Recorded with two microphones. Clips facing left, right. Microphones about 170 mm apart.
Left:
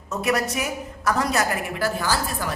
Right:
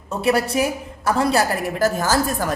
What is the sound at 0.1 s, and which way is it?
A woman's voice, 30° right (ahead or behind).